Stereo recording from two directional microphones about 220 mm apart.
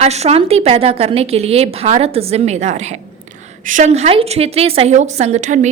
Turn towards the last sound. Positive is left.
turn(degrees=-35)  # may be behind; listen again after turning